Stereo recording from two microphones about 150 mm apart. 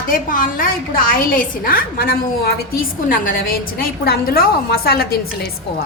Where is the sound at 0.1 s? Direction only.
65° left (ahead or behind); by 5.0 s 85° left.